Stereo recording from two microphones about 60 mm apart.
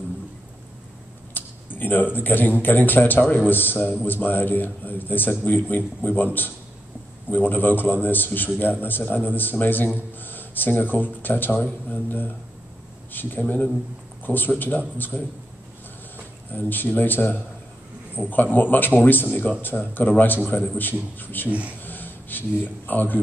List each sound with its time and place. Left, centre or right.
1.3 s a sound: left
2.1 s a man's voice: left
16.5 s a man's voice: left
21.5 s speech: right
21.8 s a sound: left
22.8 s a man's voice: left